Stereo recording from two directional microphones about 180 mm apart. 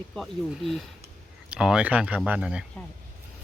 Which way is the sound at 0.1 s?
Centre (ahead or behind).